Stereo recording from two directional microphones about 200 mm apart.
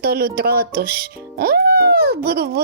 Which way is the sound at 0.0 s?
50° right (ahead or behind).